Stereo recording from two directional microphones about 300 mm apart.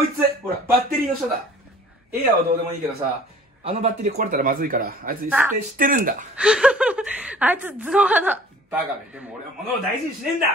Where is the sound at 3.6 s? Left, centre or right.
Right.